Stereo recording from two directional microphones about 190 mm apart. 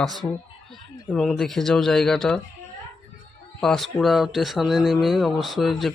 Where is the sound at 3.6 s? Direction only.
Centre (ahead or behind).